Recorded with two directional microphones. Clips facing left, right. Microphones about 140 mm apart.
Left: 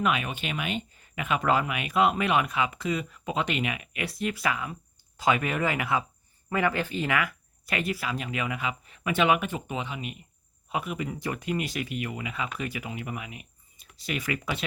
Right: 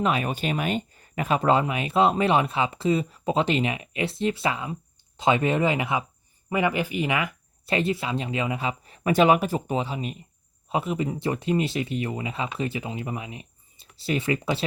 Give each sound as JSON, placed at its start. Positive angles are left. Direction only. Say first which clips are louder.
{"t": 0.0, "sound": "speech", "louder": "right 3 dB", "side_deg": -35}